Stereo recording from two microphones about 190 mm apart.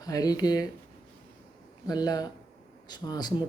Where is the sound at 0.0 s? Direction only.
20° left (ahead or behind).